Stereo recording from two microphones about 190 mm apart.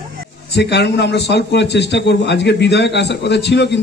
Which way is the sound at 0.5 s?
65° left (ahead or behind).